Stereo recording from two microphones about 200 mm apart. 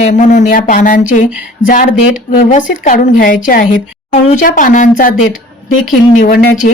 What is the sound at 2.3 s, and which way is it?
A woman's voice, 40° left (ahead or behind).